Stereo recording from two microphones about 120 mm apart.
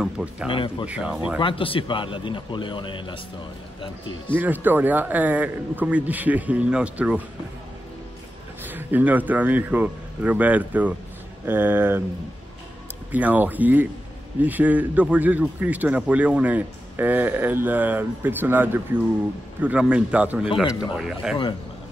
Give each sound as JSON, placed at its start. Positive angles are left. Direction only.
{"t": 0.0, "sound": "a sound", "side_deg": -10}
{"t": 0.5, "sound": "a man's voice", "side_deg": 45}
{"t": 0.8, "sound": "speech", "side_deg": -10}
{"t": 1.4, "sound": "a man's voice", "side_deg": 50}
{"t": 4.4, "sound": "speech", "side_deg": -15}
{"t": 8.6, "sound": "a man's voice", "side_deg": -15}
{"t": 13.1, "sound": "speech", "side_deg": -15}